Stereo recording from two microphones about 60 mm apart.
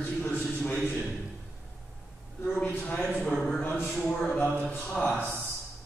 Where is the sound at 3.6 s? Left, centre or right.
Left.